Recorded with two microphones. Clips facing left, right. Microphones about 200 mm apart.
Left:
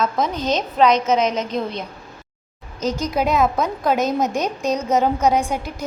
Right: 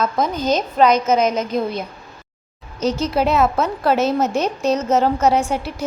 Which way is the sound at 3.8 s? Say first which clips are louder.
Right 2 dB; 15° left (ahead or behind).